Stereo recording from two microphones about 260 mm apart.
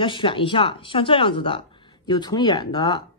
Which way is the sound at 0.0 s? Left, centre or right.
Centre.